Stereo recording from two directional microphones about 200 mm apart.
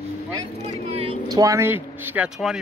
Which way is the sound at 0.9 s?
30° right (ahead or behind).